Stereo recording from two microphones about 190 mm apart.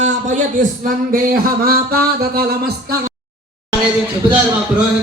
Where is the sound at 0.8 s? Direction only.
45° right (ahead or behind).